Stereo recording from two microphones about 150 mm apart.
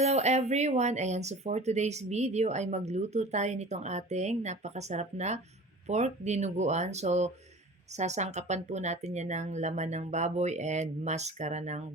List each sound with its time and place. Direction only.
0.0 s speech: 45° right (ahead or behind)